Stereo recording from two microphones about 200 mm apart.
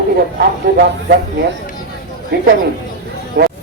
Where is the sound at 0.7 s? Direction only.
50° right (ahead or behind).